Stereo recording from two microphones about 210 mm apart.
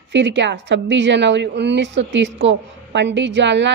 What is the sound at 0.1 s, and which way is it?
A woman's voice, 55° right (ahead or behind).